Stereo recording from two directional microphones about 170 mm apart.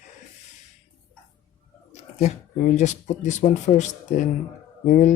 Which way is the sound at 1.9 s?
50° left (ahead or behind).